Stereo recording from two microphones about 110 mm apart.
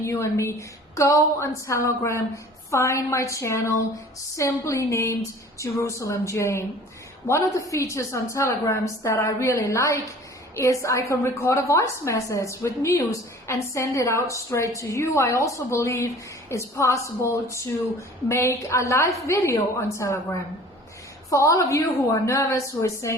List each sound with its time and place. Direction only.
0.0 s a woman's voice: 25° left (ahead or behind)
21.2 s a woman's voice: 30° left (ahead or behind)